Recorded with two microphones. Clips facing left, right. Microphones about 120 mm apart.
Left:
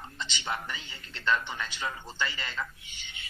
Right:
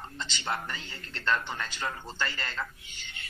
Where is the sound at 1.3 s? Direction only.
40° right (ahead or behind).